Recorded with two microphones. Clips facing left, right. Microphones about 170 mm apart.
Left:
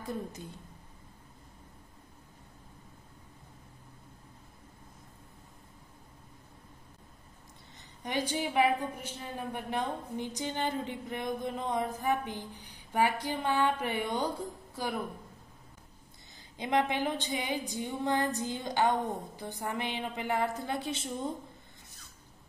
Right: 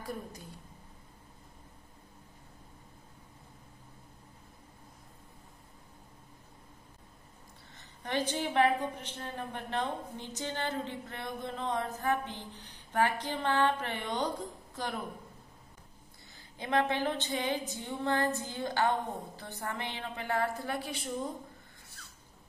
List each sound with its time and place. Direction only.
8.0 s a woman's voice: 10° left (ahead or behind)
16.5 s a woman's voice: 15° left (ahead or behind)